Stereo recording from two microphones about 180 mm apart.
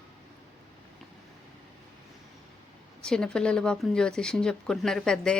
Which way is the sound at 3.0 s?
5° left (ahead or behind).